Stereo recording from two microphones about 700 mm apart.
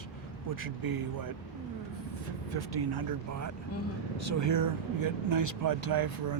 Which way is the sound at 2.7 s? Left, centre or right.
Right.